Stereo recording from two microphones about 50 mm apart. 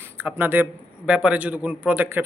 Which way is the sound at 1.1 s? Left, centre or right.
Right.